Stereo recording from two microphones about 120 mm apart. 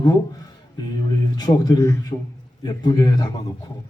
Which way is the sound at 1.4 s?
35° left (ahead or behind).